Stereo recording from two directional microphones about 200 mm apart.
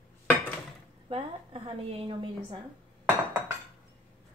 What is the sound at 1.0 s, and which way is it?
A woman's voice, 25° right (ahead or behind).